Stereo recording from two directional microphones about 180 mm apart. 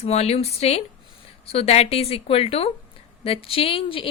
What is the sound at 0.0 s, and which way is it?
Speech, 35° left (ahead or behind).